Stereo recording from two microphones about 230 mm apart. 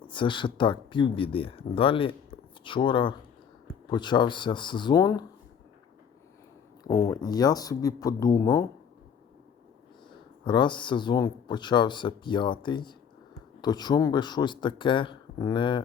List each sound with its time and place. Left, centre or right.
0.1 s speech: left
7.1 s speech: centre
10.4 s speech: centre